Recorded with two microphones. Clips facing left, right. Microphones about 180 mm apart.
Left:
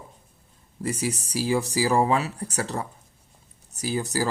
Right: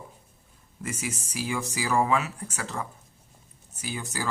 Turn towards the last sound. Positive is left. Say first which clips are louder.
# left 8 dB
turn(degrees=35)  # may be behind; listen again after turning